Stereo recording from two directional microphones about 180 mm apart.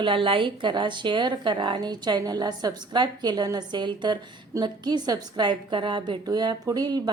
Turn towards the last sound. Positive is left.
turn(degrees=-25)  # may be behind; listen again after turning